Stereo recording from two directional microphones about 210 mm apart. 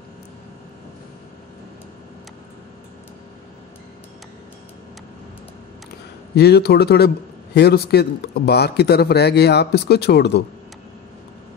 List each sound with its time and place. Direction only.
6.3 s speech: 50° left (ahead or behind)